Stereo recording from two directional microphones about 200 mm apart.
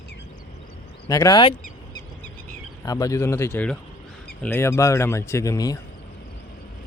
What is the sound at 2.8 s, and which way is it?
Speech, 15° left (ahead or behind).